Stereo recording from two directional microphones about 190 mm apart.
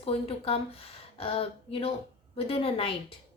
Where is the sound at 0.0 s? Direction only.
30° left (ahead or behind).